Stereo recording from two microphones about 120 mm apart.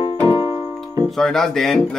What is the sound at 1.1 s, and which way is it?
Speech, 5° left (ahead or behind).